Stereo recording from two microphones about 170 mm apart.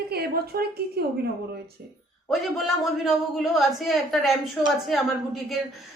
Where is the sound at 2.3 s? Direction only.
Centre (ahead or behind).